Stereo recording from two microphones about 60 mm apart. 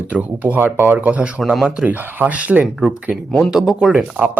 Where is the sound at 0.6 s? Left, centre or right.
Right.